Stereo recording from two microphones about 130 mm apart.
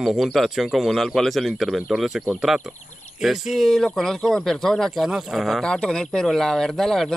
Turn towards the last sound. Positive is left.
turn(degrees=0)  # may be behind; listen again after turning